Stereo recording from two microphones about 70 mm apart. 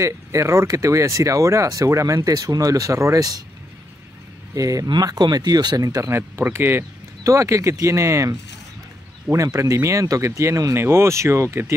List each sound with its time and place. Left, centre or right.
0.0 s speech: right
2.3 s speech: right
4.6 s speech: right
4.8 s speech: right
5.8 s speech: right
6.0 s speech: right
7.2 s speech: right
9.3 s speech: right